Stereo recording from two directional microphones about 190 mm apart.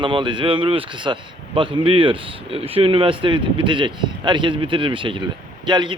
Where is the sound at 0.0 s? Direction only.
25° right (ahead or behind).